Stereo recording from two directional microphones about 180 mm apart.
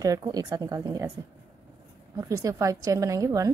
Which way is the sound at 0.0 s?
20° right (ahead or behind).